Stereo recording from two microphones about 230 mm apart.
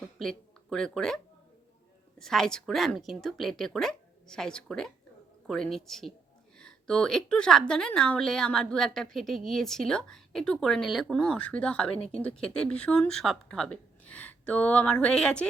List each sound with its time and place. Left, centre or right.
0.2 s a woman's voice: centre